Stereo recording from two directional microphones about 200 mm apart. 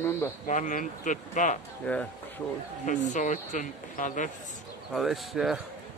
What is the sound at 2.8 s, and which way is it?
Speech, 35° left (ahead or behind).